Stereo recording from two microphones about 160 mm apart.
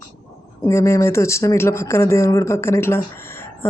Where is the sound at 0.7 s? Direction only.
15° left (ahead or behind).